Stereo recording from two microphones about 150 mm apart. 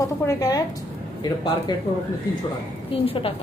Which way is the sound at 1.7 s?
30° left (ahead or behind).